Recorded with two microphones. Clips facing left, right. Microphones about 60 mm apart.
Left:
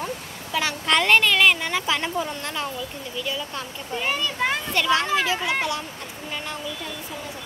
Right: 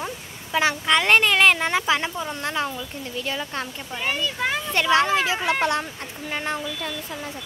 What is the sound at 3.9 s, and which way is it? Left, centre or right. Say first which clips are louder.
Speech: left 1 dB; centre.